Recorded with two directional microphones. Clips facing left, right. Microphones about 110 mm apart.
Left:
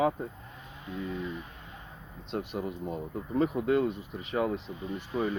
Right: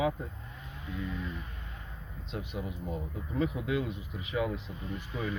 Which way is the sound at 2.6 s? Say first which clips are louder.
Left 3 dB; 50° left (ahead or behind).